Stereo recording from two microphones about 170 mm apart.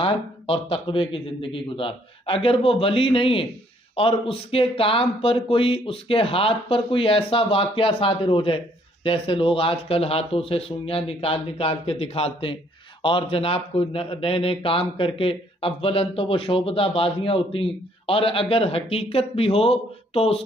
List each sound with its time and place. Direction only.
0.0 s a man's voice: 30° left (ahead or behind)